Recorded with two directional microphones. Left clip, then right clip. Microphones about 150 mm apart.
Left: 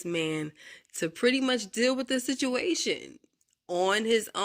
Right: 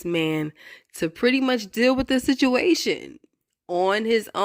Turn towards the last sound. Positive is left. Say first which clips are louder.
# right 4 dB
turn(degrees=-35)  # may be behind; listen again after turning